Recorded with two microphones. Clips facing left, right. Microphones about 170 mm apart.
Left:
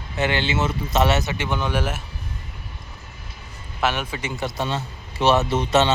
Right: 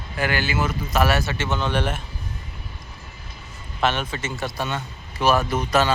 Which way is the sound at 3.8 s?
10° left (ahead or behind).